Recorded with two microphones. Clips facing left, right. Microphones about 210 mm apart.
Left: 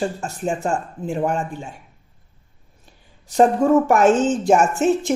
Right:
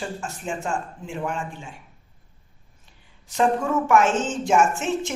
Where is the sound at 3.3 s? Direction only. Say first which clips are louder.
Left 7 dB; 35° left (ahead or behind).